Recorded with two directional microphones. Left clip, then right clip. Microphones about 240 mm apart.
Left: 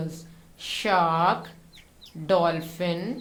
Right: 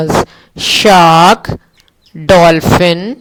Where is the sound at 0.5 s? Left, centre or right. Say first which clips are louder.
Right 18 dB; right.